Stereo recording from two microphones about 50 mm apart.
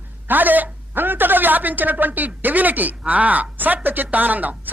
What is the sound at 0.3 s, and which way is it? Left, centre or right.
A woman's voice, right.